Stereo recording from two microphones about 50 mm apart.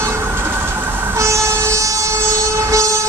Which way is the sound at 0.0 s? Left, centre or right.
Right.